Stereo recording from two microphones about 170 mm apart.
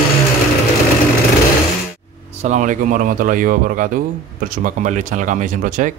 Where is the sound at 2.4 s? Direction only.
45° right (ahead or behind).